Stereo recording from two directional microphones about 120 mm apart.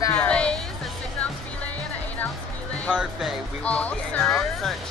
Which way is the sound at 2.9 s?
5° right (ahead or behind).